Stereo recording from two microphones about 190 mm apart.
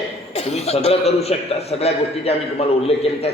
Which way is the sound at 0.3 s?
35° left (ahead or behind).